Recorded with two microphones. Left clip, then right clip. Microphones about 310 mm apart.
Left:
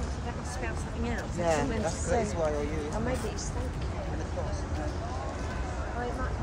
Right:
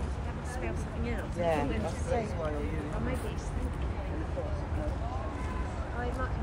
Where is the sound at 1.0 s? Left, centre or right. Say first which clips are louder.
Left 2 dB; left.